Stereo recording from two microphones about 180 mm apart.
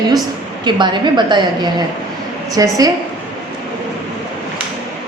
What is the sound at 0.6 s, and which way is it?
A woman's voice, 25° right (ahead or behind).